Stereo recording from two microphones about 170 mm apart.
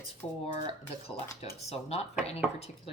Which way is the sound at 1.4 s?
35° left (ahead or behind).